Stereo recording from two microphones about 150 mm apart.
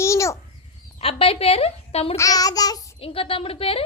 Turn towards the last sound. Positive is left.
turn(degrees=40)  # may be behind; listen again after turning